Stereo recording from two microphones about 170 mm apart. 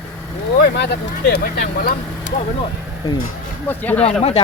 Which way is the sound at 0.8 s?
75° left (ahead or behind).